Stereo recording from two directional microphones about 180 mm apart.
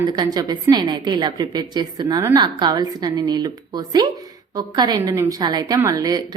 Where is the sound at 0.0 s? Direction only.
20° right (ahead or behind).